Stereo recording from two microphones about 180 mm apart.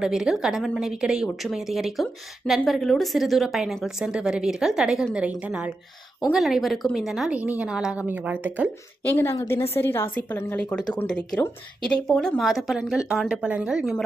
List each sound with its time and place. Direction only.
0.0 s a woman's voice: 5° right (ahead or behind)
6.3 s a woman's voice: centre (ahead or behind)
9.1 s a woman's voice: 15° left (ahead or behind); by 14.0 s 5° right (ahead or behind)